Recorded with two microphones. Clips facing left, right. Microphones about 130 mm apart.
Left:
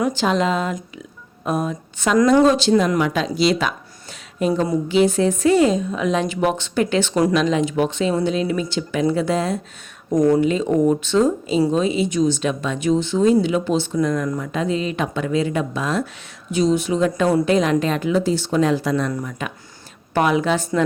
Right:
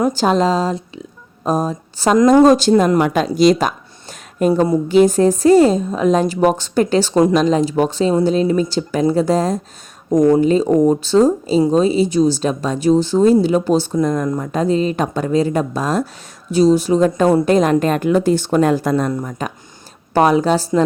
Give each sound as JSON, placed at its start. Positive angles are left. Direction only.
{"t": 0.0, "sound": "a woman's voice", "side_deg": -40}
{"t": 10.1, "sound": "speech", "side_deg": -20}
{"t": 10.4, "sound": "a woman's voice", "side_deg": -35}